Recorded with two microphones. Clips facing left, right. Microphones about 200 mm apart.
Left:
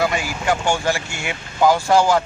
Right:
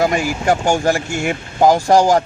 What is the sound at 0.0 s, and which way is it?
Speech, 45° right (ahead or behind).